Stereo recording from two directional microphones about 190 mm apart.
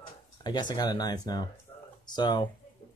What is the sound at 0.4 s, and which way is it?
Speech, 20° left (ahead or behind).